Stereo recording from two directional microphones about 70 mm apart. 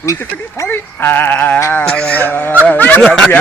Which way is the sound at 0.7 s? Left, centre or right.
Left.